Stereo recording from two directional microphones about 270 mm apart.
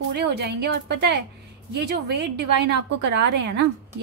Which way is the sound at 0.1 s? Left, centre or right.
Right.